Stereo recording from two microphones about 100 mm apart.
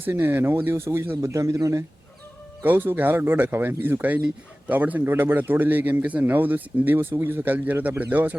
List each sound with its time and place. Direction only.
0.0 s a man's voice: 20° right (ahead or behind)
2.6 s a man's voice: 20° right (ahead or behind)